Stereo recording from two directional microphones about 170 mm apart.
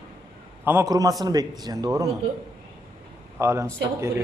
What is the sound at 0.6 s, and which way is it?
Speech, 15° right (ahead or behind).